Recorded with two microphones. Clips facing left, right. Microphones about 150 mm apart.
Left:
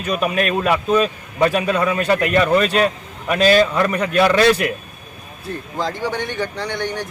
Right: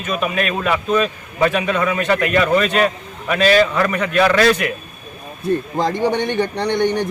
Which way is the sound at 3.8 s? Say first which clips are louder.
Even; 35° left (ahead or behind).